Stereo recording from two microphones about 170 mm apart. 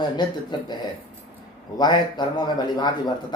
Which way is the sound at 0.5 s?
25° left (ahead or behind).